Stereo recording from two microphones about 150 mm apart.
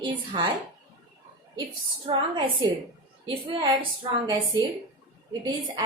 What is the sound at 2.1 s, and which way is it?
A woman's voice, 30° right (ahead or behind).